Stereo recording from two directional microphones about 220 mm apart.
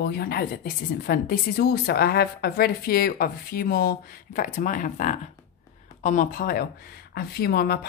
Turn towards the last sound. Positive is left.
turn(degrees=45)  # may be behind; listen again after turning